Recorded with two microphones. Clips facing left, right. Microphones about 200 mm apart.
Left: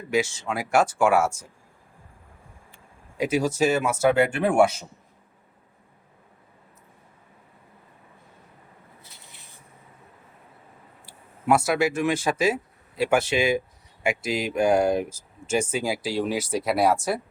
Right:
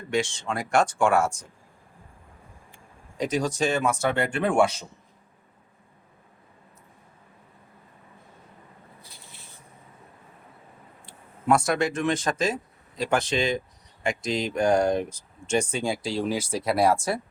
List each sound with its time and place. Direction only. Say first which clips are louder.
0.1 s speech: left 2 dB; 5° left (ahead or behind)
3.2 s speech: left 3 dB; 5° left (ahead or behind)
9.0 s a sound: right 1 dB; 20° left (ahead or behind)
11.0 s speech: even; 5° left (ahead or behind)